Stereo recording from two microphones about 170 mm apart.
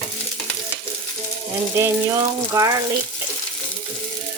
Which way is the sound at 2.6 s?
15° right (ahead or behind).